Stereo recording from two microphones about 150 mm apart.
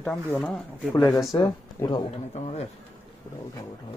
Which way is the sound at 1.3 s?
30° left (ahead or behind).